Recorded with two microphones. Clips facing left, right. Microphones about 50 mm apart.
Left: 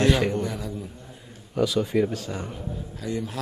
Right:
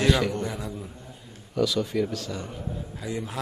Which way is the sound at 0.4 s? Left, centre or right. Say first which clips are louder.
Left 2 dB; centre.